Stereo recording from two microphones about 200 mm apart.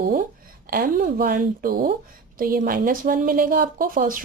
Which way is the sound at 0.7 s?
45° right (ahead or behind).